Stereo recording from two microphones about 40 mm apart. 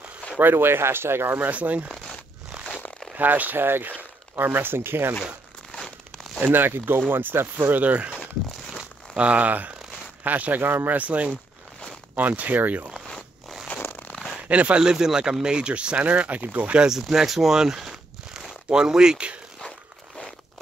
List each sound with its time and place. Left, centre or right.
0.4 s speech: right
1.4 s speech: right
2.5 s a sound: centre
3.2 s speech: right
6.4 s speech: right
7.7 s speech: right
9.1 s speech: right
14.5 s speech: right
14.8 s speech: centre
16.1 s speech: right
17.0 s speech: centre
18.5 s a sound: centre